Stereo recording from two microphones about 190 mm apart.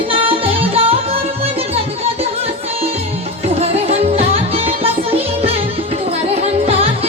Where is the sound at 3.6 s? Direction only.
35° right (ahead or behind).